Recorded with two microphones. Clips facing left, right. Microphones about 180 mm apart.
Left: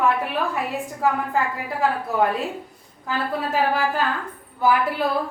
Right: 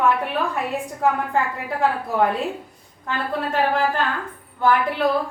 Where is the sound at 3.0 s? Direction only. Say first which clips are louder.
Even; 5° left (ahead or behind).